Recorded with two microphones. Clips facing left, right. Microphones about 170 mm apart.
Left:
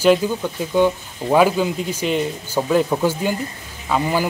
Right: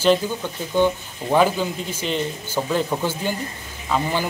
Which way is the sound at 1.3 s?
10° left (ahead or behind).